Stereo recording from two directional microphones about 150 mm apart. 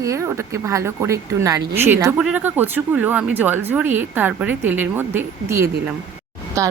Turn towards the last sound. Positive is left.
turn(degrees=-20)  # may be behind; listen again after turning